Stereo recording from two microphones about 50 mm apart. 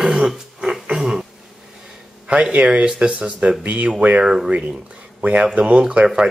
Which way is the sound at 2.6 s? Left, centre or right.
Centre.